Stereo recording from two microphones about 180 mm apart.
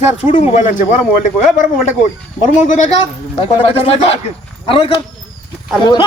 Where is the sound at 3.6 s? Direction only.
35° left (ahead or behind).